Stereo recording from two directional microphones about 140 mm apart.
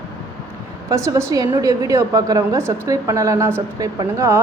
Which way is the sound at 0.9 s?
20° right (ahead or behind).